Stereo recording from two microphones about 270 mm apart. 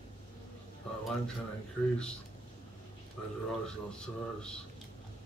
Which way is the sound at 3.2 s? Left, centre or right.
Centre.